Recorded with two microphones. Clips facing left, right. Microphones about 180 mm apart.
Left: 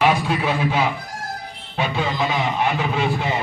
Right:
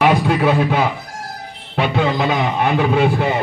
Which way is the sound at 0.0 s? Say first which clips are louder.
Right 5 dB; 60° right (ahead or behind).